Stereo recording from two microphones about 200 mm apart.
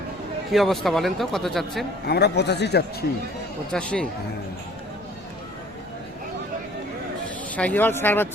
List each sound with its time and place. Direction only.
0.5 s speech: centre (ahead or behind)
2.0 s a man's voice: 55° left (ahead or behind)
3.7 s speech: 5° left (ahead or behind)
7.5 s speech: 10° left (ahead or behind)